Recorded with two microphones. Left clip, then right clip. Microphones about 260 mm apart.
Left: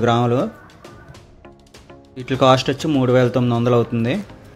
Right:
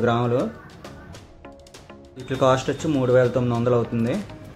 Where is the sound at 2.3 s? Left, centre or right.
Left.